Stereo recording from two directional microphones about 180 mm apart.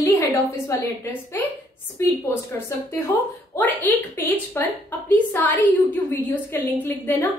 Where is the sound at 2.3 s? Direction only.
15° left (ahead or behind).